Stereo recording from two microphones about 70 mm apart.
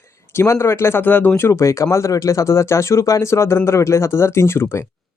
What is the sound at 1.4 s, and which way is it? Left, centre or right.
Speech, left.